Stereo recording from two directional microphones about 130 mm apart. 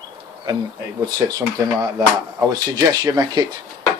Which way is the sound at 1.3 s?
30° right (ahead or behind).